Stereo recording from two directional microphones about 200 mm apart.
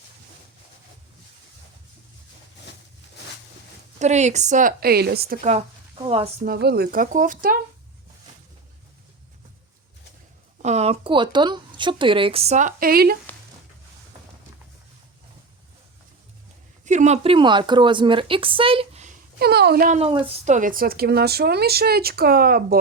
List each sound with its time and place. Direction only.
3.9 s speech: 35° right (ahead or behind); by 5.4 s 50° right (ahead or behind)
5.4 s speech: 30° right (ahead or behind)
6.4 s a woman's voice: 50° right (ahead or behind)
10.6 s speech: 35° right (ahead or behind); by 13.1 s 50° right (ahead or behind)
16.8 s speech: 35° right (ahead or behind)
19.4 s a woman's voice: 55° right (ahead or behind)
20.2 s a woman's voice: 35° right (ahead or behind)